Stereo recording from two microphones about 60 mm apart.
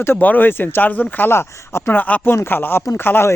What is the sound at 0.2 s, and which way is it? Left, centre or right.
Speech, left.